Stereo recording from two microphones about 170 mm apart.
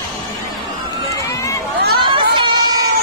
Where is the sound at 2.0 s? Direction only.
30° right (ahead or behind).